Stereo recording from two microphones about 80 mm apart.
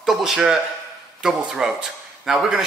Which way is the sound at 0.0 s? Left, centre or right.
Centre.